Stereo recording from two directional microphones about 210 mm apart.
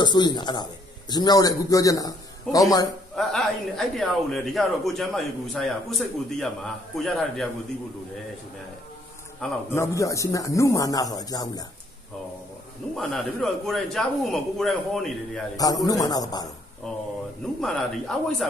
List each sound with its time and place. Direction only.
0.0 s a man's voice: 20° left (ahead or behind)
3.2 s a man's voice: centre (ahead or behind)
9.4 s a man's voice: 10° left (ahead or behind)
12.9 s a man's voice: centre (ahead or behind)
15.5 s a man's voice: 15° left (ahead or behind)
16.8 s a man's voice: centre (ahead or behind)